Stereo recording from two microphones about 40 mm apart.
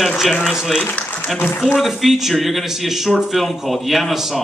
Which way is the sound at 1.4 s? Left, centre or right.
Left.